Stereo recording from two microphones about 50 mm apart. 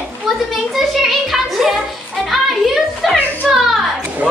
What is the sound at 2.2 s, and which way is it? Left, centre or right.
Music, centre.